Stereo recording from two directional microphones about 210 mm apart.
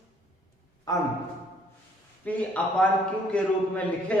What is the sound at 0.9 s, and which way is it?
Speech, 15° left (ahead or behind).